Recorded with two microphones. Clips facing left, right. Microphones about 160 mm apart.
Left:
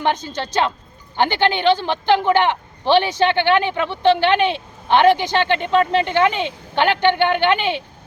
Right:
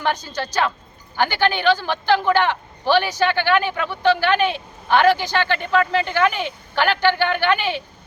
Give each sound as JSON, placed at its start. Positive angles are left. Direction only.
{"t": 0.0, "sound": "speech", "side_deg": 25}